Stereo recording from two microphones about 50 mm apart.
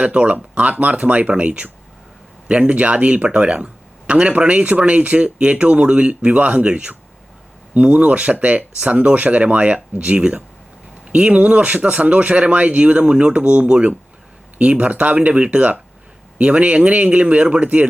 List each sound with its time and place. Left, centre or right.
0.0 s speech: right